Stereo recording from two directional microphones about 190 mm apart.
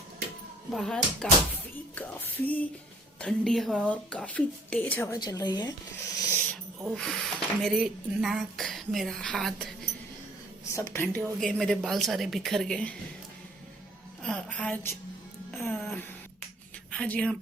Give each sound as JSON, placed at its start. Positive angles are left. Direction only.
{"t": 0.7, "sound": "a woman's voice", "side_deg": 0}
{"t": 5.2, "sound": "speech", "side_deg": 20}
{"t": 6.8, "sound": "a woman's voice", "side_deg": 0}
{"t": 10.7, "sound": "a woman's voice", "side_deg": 15}
{"t": 14.2, "sound": "a woman's voice", "side_deg": 5}